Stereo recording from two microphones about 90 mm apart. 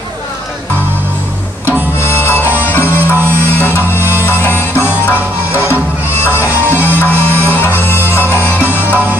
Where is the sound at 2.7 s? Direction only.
25° left (ahead or behind).